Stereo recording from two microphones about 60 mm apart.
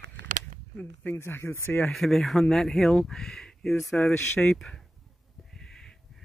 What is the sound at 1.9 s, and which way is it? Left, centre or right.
Speech, centre.